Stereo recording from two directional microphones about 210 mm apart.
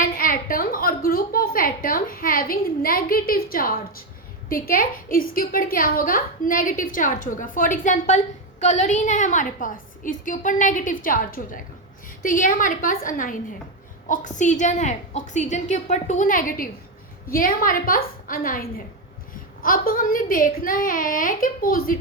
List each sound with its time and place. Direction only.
0.0 s a woman's voice: 40° left (ahead or behind)
19.6 s a woman's voice: 40° left (ahead or behind)